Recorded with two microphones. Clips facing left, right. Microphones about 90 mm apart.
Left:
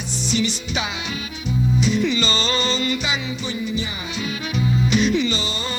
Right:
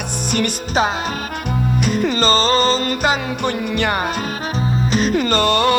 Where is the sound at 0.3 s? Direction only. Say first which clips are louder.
Right 2 dB; 55° right (ahead or behind).